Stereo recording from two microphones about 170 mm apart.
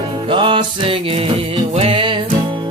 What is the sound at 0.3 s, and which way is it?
Music, 30° right (ahead or behind).